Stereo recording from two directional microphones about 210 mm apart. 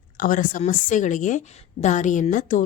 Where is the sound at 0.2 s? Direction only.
40° left (ahead or behind).